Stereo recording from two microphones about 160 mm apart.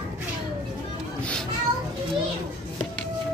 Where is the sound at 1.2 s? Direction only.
5° left (ahead or behind).